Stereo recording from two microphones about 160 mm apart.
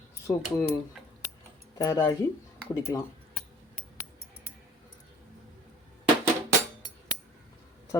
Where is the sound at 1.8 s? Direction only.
20° left (ahead or behind).